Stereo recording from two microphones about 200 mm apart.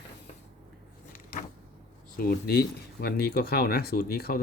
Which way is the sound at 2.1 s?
50° left (ahead or behind).